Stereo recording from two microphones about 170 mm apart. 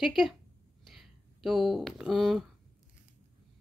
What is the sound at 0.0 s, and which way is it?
Speech, centre (ahead or behind).